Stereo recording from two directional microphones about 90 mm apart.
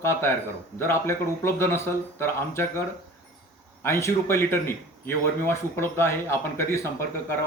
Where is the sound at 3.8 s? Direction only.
30° left (ahead or behind).